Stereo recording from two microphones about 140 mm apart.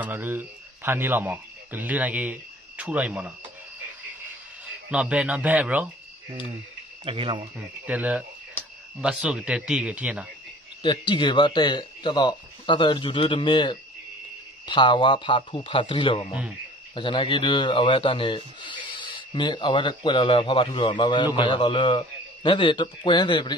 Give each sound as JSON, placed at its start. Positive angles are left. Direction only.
{"t": 0.0, "sound": "speech", "side_deg": -15}
{"t": 4.9, "sound": "speech", "side_deg": -5}
{"t": 7.1, "sound": "speech", "side_deg": -40}
{"t": 7.8, "sound": "speech", "side_deg": -10}
{"t": 10.8, "sound": "speech", "side_deg": 35}